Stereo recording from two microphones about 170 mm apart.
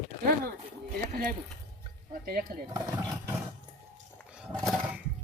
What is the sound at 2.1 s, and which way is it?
Speech, 60° right (ahead or behind).